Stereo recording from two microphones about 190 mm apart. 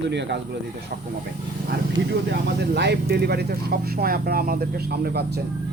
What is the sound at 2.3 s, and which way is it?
Speech, 60° right (ahead or behind).